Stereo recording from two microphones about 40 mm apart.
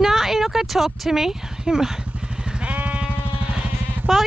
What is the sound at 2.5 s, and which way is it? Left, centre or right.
Sheep, right.